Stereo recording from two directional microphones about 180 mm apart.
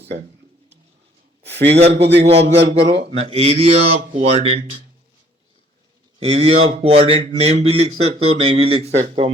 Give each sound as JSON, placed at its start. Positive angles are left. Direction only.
{"t": 1.4, "sound": "a sound", "side_deg": -70}
{"t": 1.9, "sound": "a man's voice", "side_deg": -70}
{"t": 3.2, "sound": "speech", "side_deg": -35}
{"t": 6.1, "sound": "speech", "side_deg": -35}